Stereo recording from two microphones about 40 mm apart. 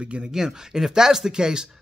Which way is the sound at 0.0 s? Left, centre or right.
Right.